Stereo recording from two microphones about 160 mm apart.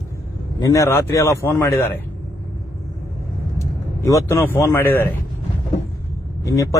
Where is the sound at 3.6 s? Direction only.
20° left (ahead or behind).